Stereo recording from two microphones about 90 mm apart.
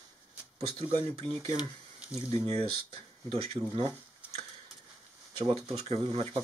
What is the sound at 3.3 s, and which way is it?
Speech, 90° right.